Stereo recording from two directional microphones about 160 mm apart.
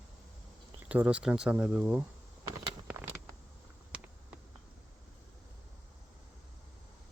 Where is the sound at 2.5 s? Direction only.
10° right (ahead or behind).